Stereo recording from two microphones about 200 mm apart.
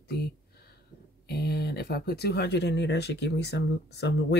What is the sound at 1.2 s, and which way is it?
Speech, 50° left (ahead or behind).